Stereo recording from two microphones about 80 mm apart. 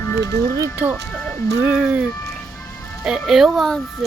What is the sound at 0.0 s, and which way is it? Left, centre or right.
Music, left.